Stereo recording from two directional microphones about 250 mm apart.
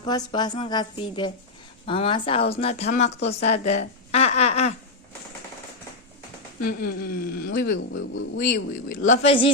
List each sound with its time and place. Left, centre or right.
0.0 s a woman's voice: centre
6.6 s speech: left
7.5 s speech: left
7.9 s speech: left
8.4 s speech: left
9.0 s speech: left